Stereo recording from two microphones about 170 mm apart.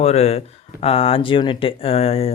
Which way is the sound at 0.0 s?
40° left (ahead or behind).